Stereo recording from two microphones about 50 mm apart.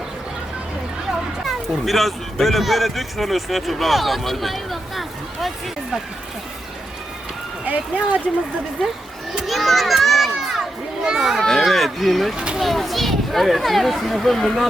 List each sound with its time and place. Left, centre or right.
1.5 s speech: centre
7.6 s speech: right
9.5 s children playing: centre
11.3 s a child's voice: centre